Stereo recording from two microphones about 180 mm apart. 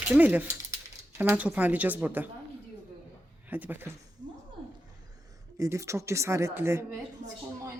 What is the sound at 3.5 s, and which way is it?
Speech, 10° right (ahead or behind).